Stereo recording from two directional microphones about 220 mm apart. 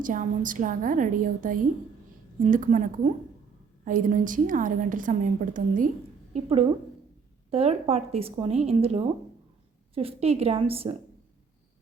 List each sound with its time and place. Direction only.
0.0 s a woman's voice: 35° right (ahead or behind)